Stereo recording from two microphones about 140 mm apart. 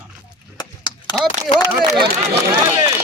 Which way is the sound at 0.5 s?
30° left (ahead or behind).